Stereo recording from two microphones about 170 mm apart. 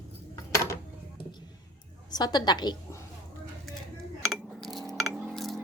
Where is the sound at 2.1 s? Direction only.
25° left (ahead or behind).